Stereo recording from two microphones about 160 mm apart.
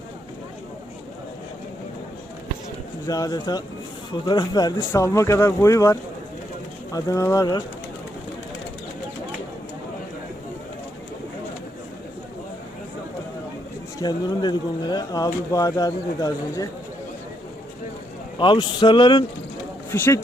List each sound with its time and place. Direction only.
3.1 s speech: 20° left (ahead or behind)
14.0 s speech: 25° left (ahead or behind)
18.3 s speech: 30° left (ahead or behind)